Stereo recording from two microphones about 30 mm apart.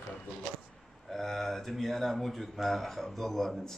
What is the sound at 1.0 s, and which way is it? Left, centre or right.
Speech, centre.